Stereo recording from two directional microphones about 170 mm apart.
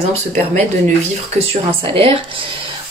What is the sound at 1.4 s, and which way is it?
Speech, 35° right (ahead or behind).